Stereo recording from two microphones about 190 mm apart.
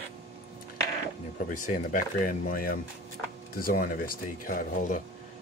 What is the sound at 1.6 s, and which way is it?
Speech, 40° left (ahead or behind).